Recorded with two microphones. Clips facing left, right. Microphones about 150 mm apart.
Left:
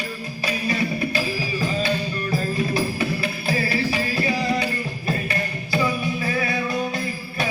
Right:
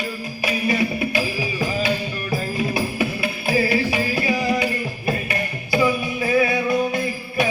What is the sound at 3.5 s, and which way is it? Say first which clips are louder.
Music: right 4 dB; 15° right (ahead or behind).